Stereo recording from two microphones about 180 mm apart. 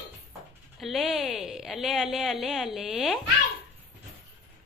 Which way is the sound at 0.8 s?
Centre (ahead or behind).